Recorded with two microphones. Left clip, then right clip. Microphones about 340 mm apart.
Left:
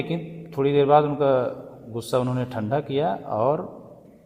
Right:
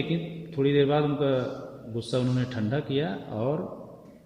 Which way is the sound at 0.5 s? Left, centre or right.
Left.